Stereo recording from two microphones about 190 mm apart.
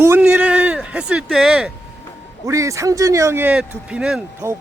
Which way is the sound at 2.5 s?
15° right (ahead or behind).